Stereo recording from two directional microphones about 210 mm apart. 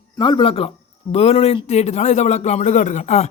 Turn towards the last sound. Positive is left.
turn(degrees=35)  # may be behind; listen again after turning